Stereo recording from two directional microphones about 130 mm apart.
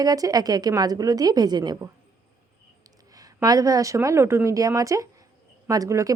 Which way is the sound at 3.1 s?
30° right (ahead or behind).